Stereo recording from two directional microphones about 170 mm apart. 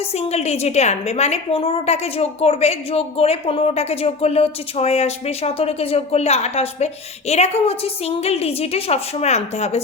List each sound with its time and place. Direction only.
0.2 s a woman's voice: 40° left (ahead or behind)